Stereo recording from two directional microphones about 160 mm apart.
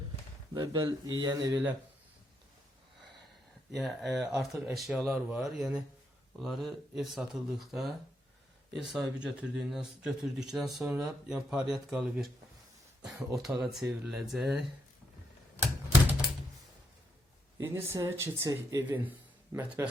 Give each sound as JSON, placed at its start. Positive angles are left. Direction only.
{"t": 0.5, "sound": "speech", "side_deg": -30}
{"t": 3.8, "sound": "speech", "side_deg": 0}
{"t": 13.7, "sound": "speech", "side_deg": 0}
{"t": 15.5, "sound": "typewriter", "side_deg": -15}
{"t": 17.6, "sound": "speech", "side_deg": -15}